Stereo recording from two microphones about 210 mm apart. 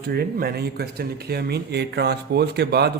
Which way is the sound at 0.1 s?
50° right (ahead or behind).